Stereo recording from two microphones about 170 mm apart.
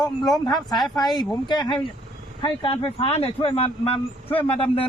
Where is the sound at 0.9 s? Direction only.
25° left (ahead or behind).